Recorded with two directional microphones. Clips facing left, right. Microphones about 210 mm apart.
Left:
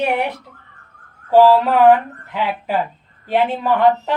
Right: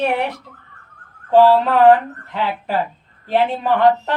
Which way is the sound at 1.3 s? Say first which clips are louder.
Left 1 dB; 5° left (ahead or behind).